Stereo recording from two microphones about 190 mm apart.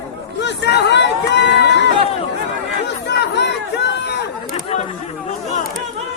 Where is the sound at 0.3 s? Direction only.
65° left (ahead or behind).